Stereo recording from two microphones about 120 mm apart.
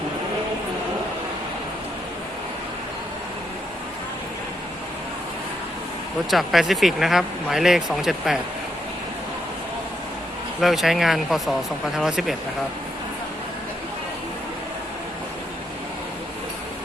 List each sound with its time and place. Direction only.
6.3 s speech: centre (ahead or behind)
10.6 s speech: centre (ahead or behind)